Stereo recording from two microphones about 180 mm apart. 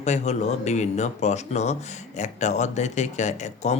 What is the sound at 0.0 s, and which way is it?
Speech, 40° left (ahead or behind).